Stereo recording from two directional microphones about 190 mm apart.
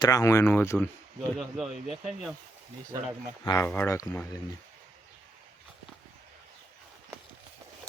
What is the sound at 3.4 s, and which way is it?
Speech, 15° left (ahead or behind).